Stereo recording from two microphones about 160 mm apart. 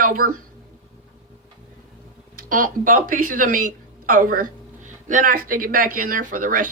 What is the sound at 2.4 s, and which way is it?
Speech, 55° right (ahead or behind).